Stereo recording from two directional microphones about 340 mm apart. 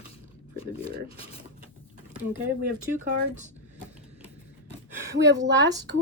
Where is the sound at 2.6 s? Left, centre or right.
Right.